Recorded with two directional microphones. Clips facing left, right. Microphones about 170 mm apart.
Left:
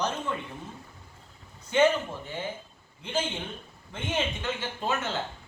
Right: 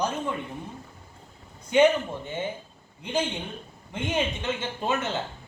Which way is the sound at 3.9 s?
15° right (ahead or behind).